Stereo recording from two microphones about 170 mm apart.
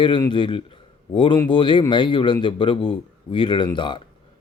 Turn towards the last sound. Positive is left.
turn(degrees=30)  # may be behind; listen again after turning